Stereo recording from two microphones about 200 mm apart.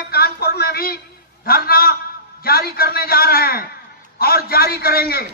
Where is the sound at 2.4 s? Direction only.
50° left (ahead or behind).